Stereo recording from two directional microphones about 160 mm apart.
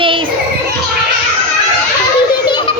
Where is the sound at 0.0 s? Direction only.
30° right (ahead or behind).